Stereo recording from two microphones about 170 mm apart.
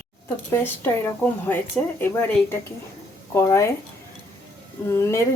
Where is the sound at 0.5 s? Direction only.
10° left (ahead or behind).